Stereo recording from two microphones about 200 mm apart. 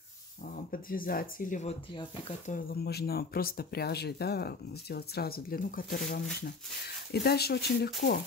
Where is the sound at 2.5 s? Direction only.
50° left (ahead or behind).